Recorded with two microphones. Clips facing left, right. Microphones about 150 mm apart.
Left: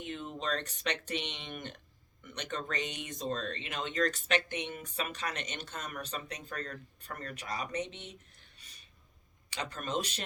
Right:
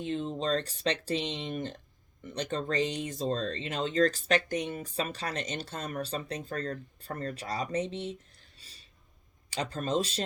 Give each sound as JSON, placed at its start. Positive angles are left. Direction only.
{"t": 0.0, "sound": "speech", "side_deg": -30}
{"t": 8.5, "sound": "a sound", "side_deg": -30}
{"t": 9.5, "sound": "speech", "side_deg": -30}